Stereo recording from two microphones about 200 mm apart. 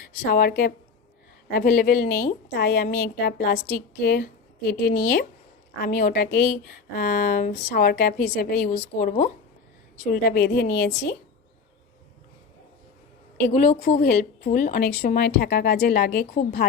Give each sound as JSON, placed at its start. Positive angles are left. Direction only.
{"t": 0.3, "sound": "a woman's voice", "side_deg": 45}
{"t": 13.4, "sound": "a woman's voice", "side_deg": 45}